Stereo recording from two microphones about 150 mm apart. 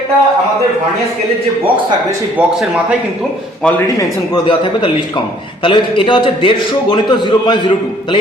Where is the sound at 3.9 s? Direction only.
30° left (ahead or behind).